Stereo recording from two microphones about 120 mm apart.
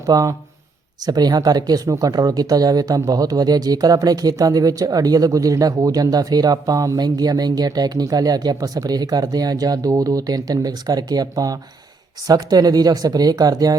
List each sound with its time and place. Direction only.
0.1 s speech: 30° right (ahead or behind)